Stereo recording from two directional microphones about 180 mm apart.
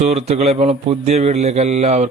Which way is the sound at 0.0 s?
35° right (ahead or behind).